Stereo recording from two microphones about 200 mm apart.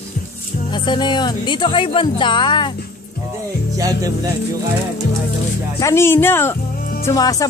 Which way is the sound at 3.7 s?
15° right (ahead or behind).